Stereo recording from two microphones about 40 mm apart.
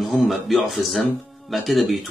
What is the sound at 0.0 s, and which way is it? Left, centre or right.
Speech, centre.